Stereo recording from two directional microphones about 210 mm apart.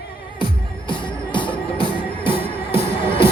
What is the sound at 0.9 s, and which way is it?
Music, 25° left (ahead or behind).